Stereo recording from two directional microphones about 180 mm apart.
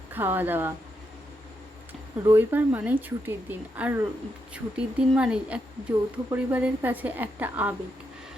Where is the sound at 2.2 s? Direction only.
10° right (ahead or behind).